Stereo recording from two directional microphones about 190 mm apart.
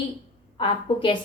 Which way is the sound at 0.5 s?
25° left (ahead or behind).